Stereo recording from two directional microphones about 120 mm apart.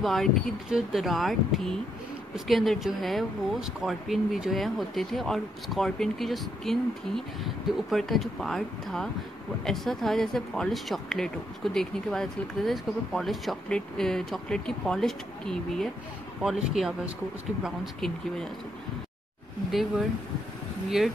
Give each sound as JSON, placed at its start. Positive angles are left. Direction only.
{"t": 0.0, "sound": "speech", "side_deg": 0}
{"t": 19.7, "sound": "speech", "side_deg": 0}